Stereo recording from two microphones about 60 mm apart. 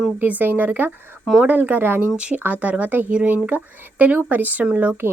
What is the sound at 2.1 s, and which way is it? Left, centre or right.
Speech, centre.